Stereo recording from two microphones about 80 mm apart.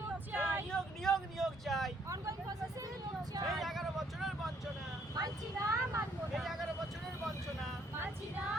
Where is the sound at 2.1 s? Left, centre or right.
Right.